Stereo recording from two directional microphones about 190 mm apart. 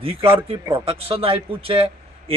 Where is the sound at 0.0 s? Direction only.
30° right (ahead or behind).